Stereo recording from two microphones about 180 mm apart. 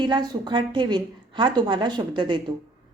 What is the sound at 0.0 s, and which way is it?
A woman's voice, 25° right (ahead or behind).